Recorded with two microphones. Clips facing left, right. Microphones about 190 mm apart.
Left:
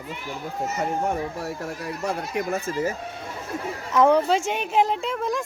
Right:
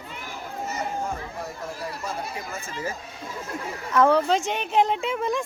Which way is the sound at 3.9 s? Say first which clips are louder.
Left 1 dB; 15° left (ahead or behind).